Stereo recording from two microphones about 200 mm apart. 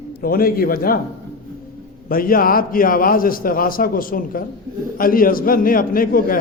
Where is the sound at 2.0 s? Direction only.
45° left (ahead or behind).